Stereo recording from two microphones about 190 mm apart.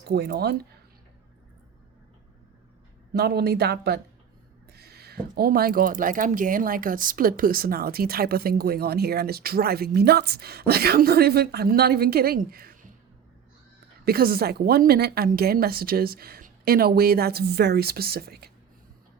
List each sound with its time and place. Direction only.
0.0 s speech: 55° right (ahead or behind)
3.1 s speech: 55° right (ahead or behind)
14.0 s speech: 50° right (ahead or behind)